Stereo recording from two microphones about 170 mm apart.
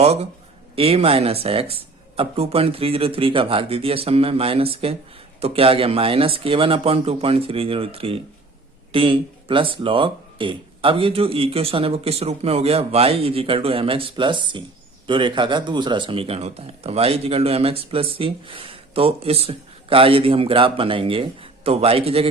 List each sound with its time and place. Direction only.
0.0 s speech: 40° right (ahead or behind)